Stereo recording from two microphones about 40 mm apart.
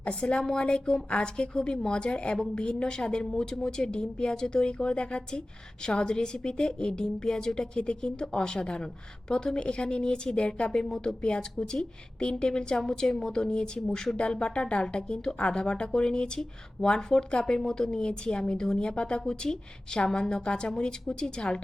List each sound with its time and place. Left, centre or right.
0.0 s speech: left; by 14.2 s centre
14.2 s speech: left
19.2 s speech: centre